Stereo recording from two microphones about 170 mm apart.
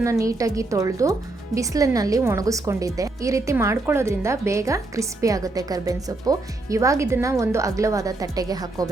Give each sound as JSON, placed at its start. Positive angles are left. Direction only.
{"t": 0.0, "sound": "a woman's voice", "side_deg": -20}